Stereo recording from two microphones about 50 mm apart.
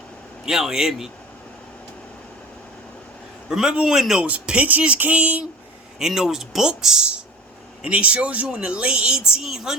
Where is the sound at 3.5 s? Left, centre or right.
Centre.